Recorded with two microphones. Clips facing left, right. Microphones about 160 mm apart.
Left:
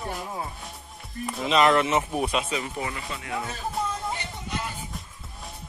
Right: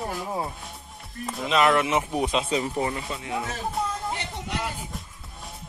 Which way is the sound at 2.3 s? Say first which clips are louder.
Right 3 dB; 30° right (ahead or behind).